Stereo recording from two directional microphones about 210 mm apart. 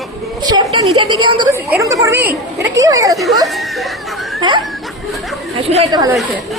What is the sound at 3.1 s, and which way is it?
Speech, centre (ahead or behind).